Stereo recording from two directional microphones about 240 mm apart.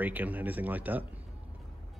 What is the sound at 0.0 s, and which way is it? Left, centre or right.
Speech, centre.